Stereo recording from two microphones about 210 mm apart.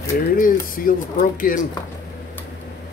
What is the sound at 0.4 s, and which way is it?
Speech, 40° left (ahead or behind).